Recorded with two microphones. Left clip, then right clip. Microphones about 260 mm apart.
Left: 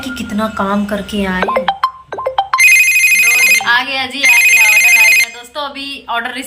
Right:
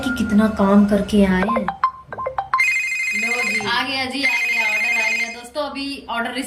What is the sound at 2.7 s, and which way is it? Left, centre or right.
Ringtone, left.